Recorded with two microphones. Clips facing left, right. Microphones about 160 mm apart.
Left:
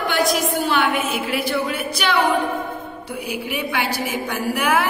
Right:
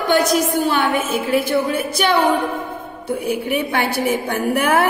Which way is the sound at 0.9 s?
50° right (ahead or behind).